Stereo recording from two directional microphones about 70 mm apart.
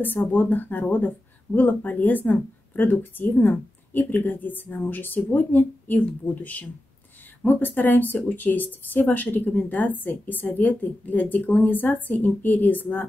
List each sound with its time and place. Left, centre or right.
0.3 s speech: left